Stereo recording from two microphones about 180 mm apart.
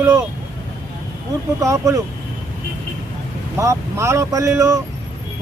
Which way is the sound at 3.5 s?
15° right (ahead or behind).